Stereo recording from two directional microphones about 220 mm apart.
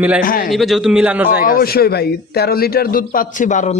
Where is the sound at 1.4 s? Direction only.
40° left (ahead or behind).